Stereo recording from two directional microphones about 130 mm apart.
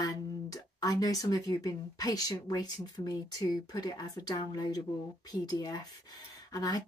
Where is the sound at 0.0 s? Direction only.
25° left (ahead or behind).